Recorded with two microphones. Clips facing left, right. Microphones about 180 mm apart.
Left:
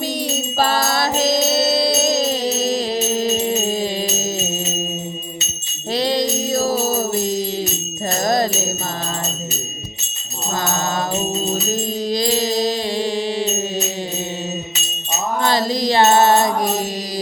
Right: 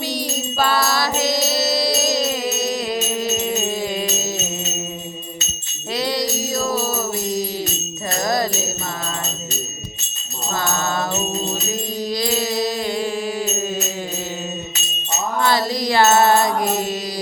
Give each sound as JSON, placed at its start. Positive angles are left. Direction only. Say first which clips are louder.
{"t": 0.6, "sound": "music", "louder": "left 1 dB", "side_deg": 40}
{"t": 0.9, "sound": "mantra", "louder": "left 2 dB", "side_deg": 25}
{"t": 1.4, "sound": "music", "louder": "left 3 dB", "side_deg": 25}
{"t": 5.9, "sound": "music", "louder": "left 3 dB", "side_deg": 25}
{"t": 6.7, "sound": "jingle bell", "louder": "left 3 dB", "side_deg": 45}
{"t": 8.2, "sound": "music", "louder": "left 3 dB", "side_deg": 25}
{"t": 11.7, "sound": "music", "louder": "left 3 dB", "side_deg": 25}
{"t": 13.2, "sound": "mantra", "louder": "left 2 dB", "side_deg": 30}
{"t": 15.4, "sound": "music", "louder": "left 2 dB", "side_deg": 20}